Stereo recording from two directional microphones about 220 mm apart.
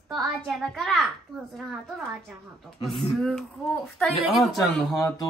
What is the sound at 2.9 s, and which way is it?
Child singing, centre (ahead or behind).